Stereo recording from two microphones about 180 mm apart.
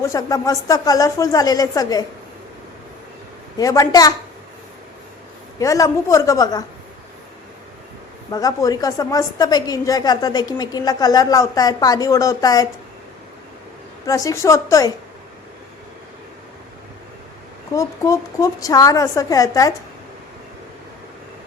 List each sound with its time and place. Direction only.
0.0 s a woman's voice: 20° left (ahead or behind)
3.6 s a woman's voice: 20° left (ahead or behind)
5.5 s a woman's voice: 20° left (ahead or behind)
8.3 s a woman's voice: 20° left (ahead or behind)
14.1 s a woman's voice: 20° left (ahead or behind)
17.7 s a woman's voice: 15° left (ahead or behind)